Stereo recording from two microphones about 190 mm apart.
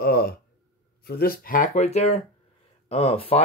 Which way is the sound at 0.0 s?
55° left (ahead or behind).